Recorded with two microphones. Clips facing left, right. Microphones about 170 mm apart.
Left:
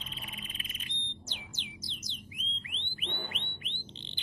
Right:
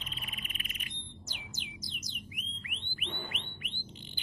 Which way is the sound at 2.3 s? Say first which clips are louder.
Even; 30° left (ahead or behind).